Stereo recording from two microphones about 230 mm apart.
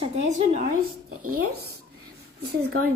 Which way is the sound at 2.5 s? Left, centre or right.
Right.